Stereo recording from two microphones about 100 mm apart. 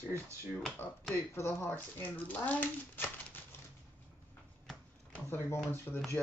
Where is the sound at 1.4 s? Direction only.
25° left (ahead or behind).